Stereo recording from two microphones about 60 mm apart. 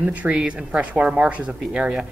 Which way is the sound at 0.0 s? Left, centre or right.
Right.